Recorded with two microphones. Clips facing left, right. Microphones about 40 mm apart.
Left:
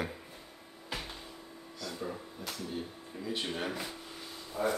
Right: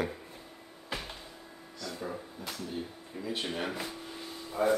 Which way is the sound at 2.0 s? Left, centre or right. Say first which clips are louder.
Right 1 dB; centre.